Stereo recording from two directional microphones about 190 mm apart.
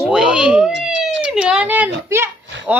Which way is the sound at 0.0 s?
5° right (ahead or behind).